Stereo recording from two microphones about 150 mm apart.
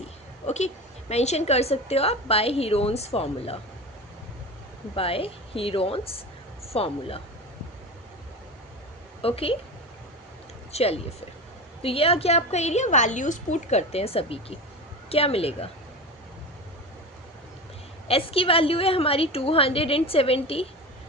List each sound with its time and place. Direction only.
0.4 s a woman's voice: 50° left (ahead or behind)
4.9 s a woman's voice: 40° left (ahead or behind)
9.2 s a woman's voice: 40° left (ahead or behind)
10.7 s a woman's voice: 45° left (ahead or behind)
18.1 s a woman's voice: 40° left (ahead or behind)